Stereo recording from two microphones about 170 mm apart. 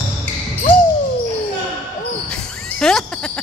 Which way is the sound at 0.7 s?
10° left (ahead or behind).